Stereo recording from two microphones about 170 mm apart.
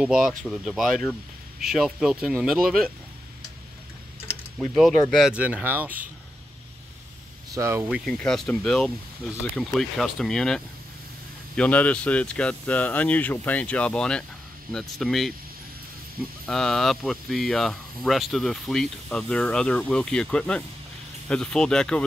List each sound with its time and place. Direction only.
0.0 s speech: 5° right (ahead or behind)
4.3 s typing: centre (ahead or behind)
5.1 s speech: 5° right (ahead or behind)
7.5 s speech: 15° right (ahead or behind)
7.9 s speech: 5° left (ahead or behind)
16.4 s speech: centre (ahead or behind)